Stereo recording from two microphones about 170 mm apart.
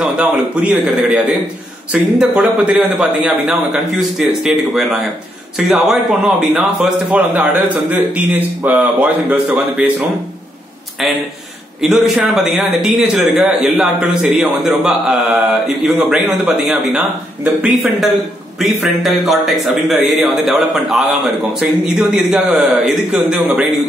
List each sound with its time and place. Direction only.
0.0 s a man's voice: 5° right (ahead or behind)